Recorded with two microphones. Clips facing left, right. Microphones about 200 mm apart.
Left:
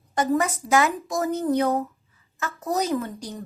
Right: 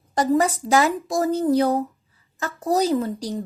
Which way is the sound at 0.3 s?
30° right (ahead or behind).